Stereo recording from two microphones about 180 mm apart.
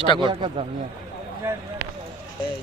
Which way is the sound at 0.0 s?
25° left (ahead or behind).